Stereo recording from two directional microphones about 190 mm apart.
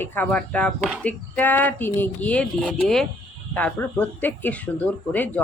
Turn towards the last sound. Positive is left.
turn(degrees=10)  # may be behind; listen again after turning